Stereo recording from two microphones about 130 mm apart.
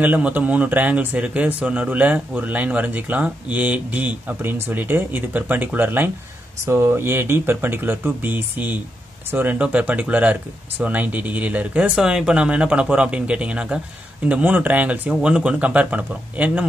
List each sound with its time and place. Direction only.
0.0 s speech: 15° right (ahead or behind)